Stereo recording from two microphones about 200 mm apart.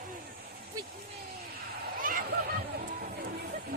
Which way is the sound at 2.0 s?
45° right (ahead or behind).